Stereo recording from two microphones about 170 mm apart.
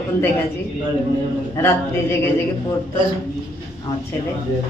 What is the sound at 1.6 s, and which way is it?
Speech, 15° left (ahead or behind).